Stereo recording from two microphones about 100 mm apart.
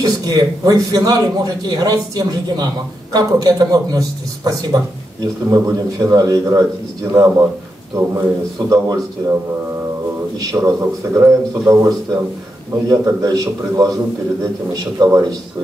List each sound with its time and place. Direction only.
0.0 s a man's voice: 40° right (ahead or behind)
8.5 s a man's voice: 35° right (ahead or behind)
10.4 s a man's voice: 30° right (ahead or behind)